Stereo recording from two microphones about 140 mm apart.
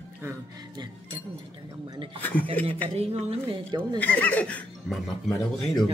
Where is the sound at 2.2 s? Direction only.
15° left (ahead or behind).